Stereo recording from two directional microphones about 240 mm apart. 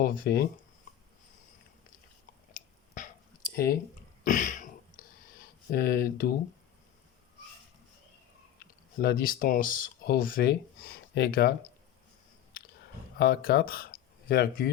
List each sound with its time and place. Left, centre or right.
0.0 s speech: left
3.5 s speech: left
4.2 s throat clearing: left
5.7 s speech: left
8.5 s speech: left
13.1 s speech: left